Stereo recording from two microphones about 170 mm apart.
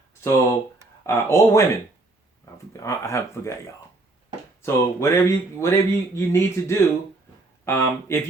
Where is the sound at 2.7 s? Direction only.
15° left (ahead or behind).